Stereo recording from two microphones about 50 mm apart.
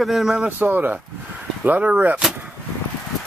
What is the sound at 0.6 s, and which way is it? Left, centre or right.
Speech, right.